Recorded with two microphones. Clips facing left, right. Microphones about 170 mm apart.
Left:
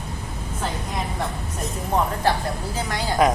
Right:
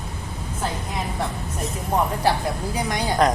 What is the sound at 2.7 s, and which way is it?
Speech, 15° right (ahead or behind).